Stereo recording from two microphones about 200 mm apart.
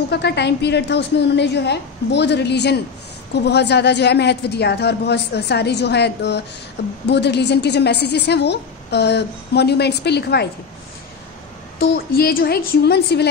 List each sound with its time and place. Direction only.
0.1 s a woman's voice: 55° left (ahead or behind)
11.8 s a woman's voice: 50° left (ahead or behind)